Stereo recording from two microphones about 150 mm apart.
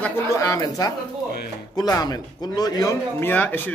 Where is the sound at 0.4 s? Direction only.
25° left (ahead or behind).